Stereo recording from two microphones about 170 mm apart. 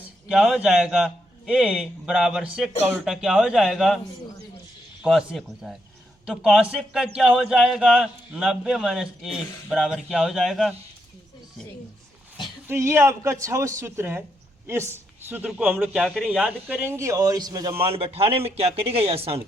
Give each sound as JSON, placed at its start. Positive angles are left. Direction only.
{"t": 0.3, "sound": "a man's voice", "side_deg": -5}
{"t": 5.0, "sound": "a man's voice", "side_deg": 0}
{"t": 12.6, "sound": "a man's voice", "side_deg": -15}
{"t": 17.8, "sound": "speech", "side_deg": -35}